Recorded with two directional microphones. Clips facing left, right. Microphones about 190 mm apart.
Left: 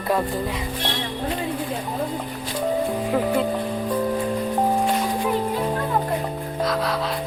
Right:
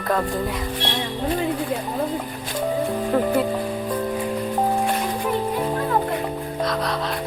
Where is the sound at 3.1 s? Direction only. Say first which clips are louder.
Right 2 dB; centre (ahead or behind).